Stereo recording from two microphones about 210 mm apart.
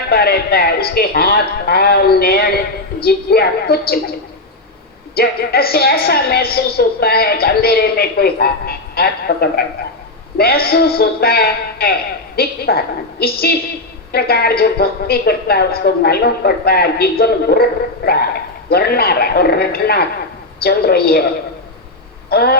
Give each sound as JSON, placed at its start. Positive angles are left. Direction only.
{"t": 0.1, "sound": "a woman's voice", "side_deg": 45}
{"t": 5.1, "sound": "a woman's voice", "side_deg": 45}
{"t": 22.3, "sound": "a sound", "side_deg": 50}